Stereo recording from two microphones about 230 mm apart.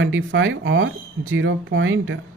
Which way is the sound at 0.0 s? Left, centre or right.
Right.